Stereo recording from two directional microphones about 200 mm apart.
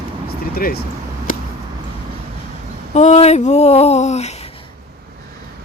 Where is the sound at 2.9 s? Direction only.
35° left (ahead or behind).